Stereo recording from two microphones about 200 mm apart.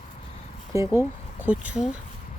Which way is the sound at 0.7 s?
10° right (ahead or behind).